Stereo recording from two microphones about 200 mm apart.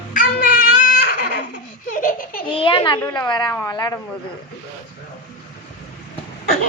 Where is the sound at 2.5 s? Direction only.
25° left (ahead or behind).